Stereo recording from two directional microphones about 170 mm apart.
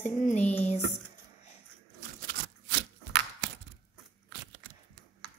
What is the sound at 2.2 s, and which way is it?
Scissors, 80° right.